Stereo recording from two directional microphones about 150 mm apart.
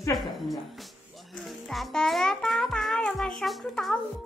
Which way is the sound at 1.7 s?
Centre (ahead or behind).